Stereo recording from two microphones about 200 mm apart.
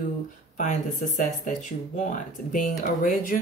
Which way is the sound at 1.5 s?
40° left (ahead or behind).